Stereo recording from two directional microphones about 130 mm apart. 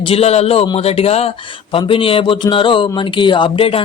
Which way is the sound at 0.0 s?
50° left (ahead or behind).